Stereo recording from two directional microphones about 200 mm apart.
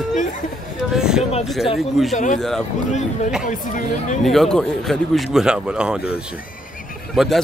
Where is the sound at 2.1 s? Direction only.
40° left (ahead or behind).